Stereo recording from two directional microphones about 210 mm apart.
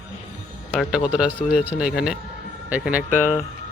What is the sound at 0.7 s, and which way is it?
Speech, 5° right (ahead or behind).